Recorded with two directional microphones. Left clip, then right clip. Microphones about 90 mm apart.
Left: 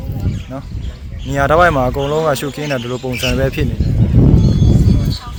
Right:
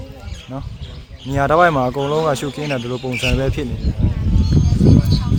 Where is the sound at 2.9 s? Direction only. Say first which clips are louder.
Left 2 dB; 25° left (ahead or behind).